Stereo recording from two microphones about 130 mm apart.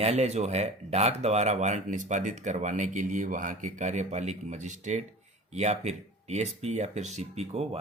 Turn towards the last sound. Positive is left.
turn(degrees=-55)  # may be behind; listen again after turning